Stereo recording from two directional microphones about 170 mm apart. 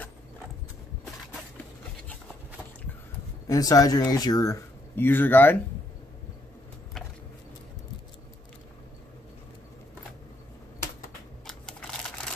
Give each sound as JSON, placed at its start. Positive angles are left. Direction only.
{"t": 3.4, "sound": "speech", "side_deg": 20}
{"t": 11.4, "sound": "typing", "side_deg": 5}